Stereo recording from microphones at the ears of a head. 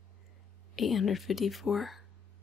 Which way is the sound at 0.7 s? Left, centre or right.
Left.